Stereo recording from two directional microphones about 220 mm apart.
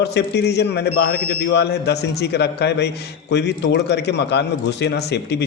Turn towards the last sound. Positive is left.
turn(degrees=50)  # may be behind; listen again after turning